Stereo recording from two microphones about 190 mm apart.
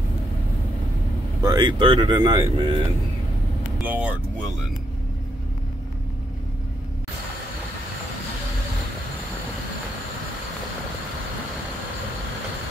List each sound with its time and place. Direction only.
1.4 s speech: 20° right (ahead or behind)
3.8 s speech: 10° right (ahead or behind)